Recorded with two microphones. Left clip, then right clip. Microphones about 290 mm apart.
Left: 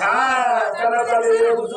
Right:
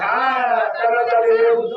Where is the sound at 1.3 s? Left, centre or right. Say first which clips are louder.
Right 1 dB; left.